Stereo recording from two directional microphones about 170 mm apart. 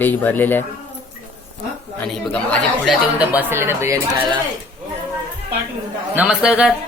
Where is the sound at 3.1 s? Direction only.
10° right (ahead or behind).